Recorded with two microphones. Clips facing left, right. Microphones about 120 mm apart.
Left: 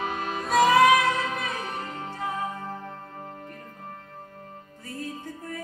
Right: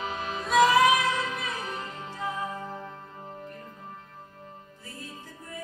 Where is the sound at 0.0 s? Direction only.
50° left (ahead or behind).